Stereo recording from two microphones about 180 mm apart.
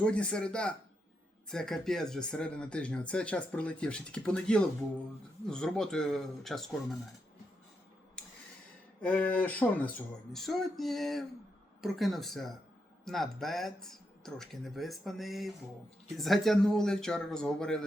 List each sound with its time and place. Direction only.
0.0 s speech: 5° left (ahead or behind)
9.0 s speech: 5° left (ahead or behind)